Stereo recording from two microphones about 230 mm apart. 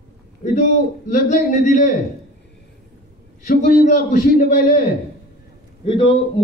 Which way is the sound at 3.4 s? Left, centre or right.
Left.